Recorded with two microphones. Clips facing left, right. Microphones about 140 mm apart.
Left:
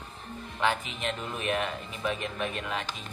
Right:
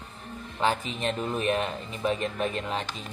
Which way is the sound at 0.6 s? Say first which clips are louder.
Right 2 dB; 35° right (ahead or behind).